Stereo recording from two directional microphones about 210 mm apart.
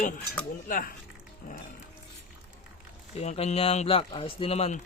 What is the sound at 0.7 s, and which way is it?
Speech, 40° left (ahead or behind).